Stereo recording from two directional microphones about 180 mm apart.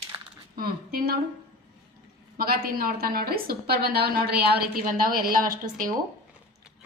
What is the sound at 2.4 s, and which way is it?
A woman's voice, 55° right (ahead or behind).